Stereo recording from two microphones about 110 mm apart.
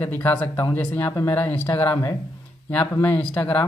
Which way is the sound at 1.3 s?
15° left (ahead or behind).